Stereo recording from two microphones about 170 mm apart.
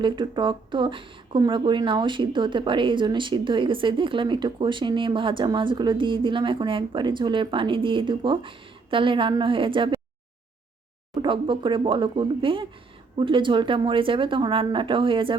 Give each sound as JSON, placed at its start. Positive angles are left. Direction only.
{"t": 0.0, "sound": "speech", "side_deg": -30}
{"t": 11.1, "sound": "speech", "side_deg": -25}